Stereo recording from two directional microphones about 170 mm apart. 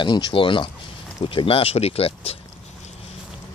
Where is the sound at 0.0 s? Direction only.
30° left (ahead or behind).